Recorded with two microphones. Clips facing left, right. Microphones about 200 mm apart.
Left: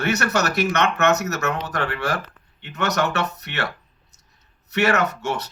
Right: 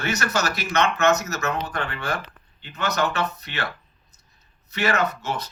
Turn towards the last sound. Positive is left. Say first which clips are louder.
# left 2 dB
turn(degrees=75)  # may be behind; listen again after turning